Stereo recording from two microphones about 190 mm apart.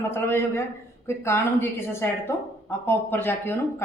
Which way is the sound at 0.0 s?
10° left (ahead or behind).